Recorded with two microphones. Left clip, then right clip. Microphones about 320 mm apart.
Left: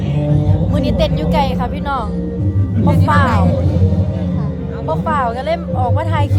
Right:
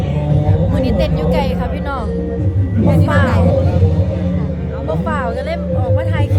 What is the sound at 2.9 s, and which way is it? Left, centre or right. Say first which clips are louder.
Speech: left 2 dB; centre.